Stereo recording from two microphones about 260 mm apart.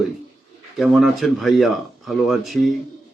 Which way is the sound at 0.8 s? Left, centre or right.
Centre.